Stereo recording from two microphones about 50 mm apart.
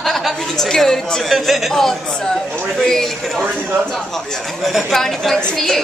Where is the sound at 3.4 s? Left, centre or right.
Right.